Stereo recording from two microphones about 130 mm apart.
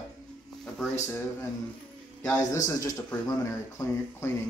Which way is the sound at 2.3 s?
30° left (ahead or behind).